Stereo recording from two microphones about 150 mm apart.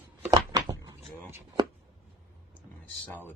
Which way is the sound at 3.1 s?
15° left (ahead or behind).